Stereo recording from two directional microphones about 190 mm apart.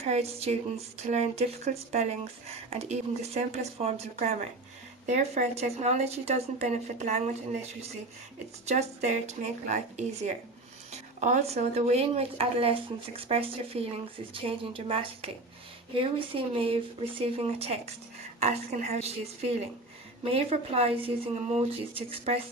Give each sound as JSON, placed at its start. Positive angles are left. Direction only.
{"t": 0.0, "sound": "speech", "side_deg": -35}
{"t": 8.6, "sound": "speech", "side_deg": -35}